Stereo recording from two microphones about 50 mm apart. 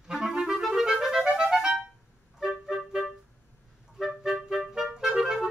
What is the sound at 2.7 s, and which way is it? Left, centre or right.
Clarinet, centre.